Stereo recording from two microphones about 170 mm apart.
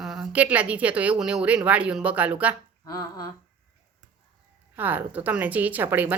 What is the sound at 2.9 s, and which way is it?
Speech, 20° left (ahead or behind).